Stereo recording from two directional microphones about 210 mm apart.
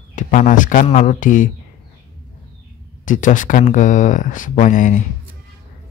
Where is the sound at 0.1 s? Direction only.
35° left (ahead or behind).